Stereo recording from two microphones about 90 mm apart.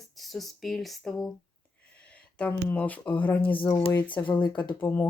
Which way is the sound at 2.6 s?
15° left (ahead or behind).